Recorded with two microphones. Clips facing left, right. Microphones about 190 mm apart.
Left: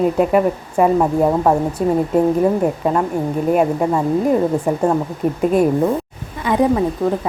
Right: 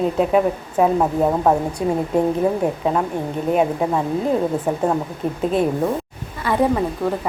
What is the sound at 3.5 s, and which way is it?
Speech, centre (ahead or behind).